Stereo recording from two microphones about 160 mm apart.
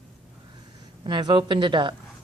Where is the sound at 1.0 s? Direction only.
30° right (ahead or behind).